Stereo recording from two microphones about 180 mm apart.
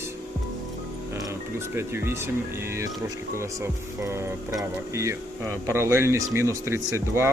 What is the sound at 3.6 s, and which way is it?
Speech, 15° right (ahead or behind).